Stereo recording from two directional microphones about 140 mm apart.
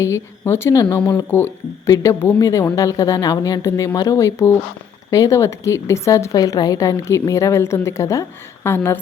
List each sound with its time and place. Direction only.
0.0 s speech: 20° left (ahead or behind)